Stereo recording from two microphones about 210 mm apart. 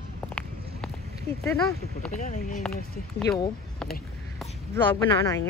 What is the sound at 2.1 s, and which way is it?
Speech, 35° left (ahead or behind).